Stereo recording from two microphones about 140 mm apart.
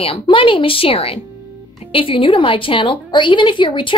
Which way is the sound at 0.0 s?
40° left (ahead or behind).